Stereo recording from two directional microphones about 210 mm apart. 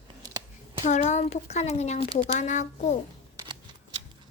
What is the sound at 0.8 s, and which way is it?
Speech, 35° left (ahead or behind).